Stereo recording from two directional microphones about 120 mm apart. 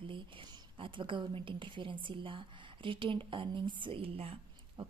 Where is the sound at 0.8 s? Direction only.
45° right (ahead or behind).